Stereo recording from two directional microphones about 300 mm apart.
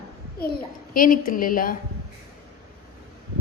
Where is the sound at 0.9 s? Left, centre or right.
Left.